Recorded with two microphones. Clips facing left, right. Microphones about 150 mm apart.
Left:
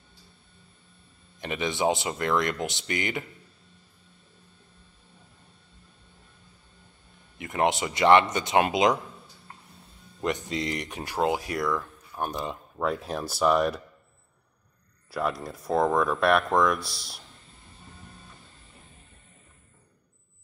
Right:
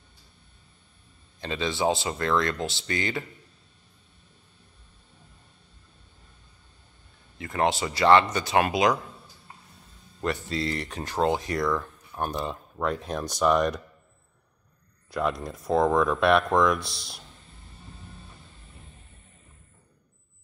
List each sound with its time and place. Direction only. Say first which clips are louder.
1.4 s speech: even; 20° left (ahead or behind)
7.3 s speech: even; 20° left (ahead or behind)
10.2 s speech: even; 15° left (ahead or behind)
15.0 s speech: right 1 dB; centre (ahead or behind)